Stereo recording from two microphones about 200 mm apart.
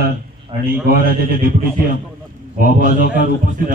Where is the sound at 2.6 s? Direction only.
40° right (ahead or behind).